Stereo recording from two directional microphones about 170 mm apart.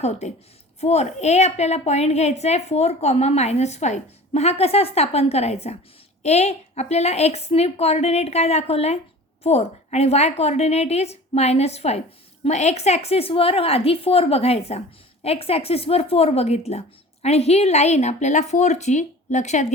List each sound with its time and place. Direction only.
0.0 s a woman's voice: 40° left (ahead or behind)